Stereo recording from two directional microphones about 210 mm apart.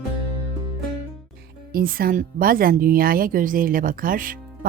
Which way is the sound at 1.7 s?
45° right (ahead or behind).